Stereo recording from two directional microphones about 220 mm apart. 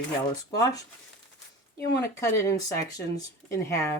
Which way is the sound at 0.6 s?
15° left (ahead or behind).